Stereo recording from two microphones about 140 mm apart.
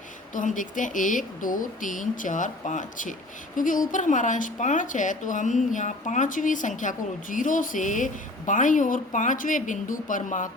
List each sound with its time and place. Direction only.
0.3 s speech: 70° left (ahead or behind)